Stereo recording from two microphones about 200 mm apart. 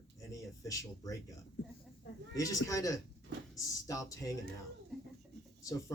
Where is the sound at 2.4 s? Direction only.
15° left (ahead or behind).